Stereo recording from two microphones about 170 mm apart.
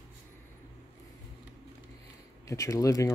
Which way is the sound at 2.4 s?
20° left (ahead or behind).